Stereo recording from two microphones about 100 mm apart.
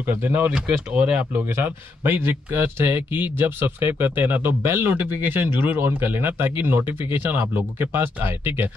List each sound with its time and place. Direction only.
0.0 s speech: 20° right (ahead or behind)
1.3 s speech: 20° right (ahead or behind)